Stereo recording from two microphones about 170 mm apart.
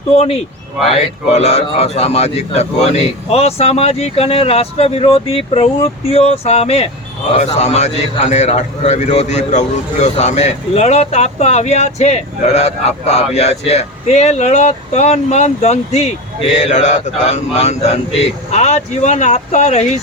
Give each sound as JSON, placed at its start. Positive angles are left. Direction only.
{"t": 0.2, "sound": "a man's voice", "side_deg": 35}